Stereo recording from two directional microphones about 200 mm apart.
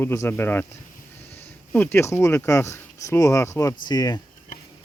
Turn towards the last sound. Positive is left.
turn(degrees=20)  # may be behind; listen again after turning